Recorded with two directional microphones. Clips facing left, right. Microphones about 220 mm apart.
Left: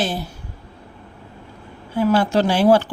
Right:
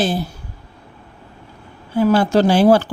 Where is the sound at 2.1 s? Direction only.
40° right (ahead or behind).